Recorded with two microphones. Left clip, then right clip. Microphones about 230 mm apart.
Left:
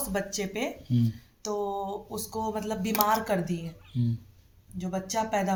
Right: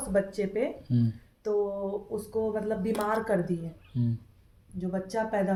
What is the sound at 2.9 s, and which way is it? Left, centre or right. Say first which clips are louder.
Speech: left 4 dB; left.